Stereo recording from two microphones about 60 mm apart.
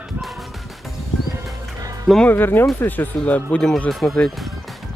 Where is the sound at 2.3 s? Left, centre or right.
Left.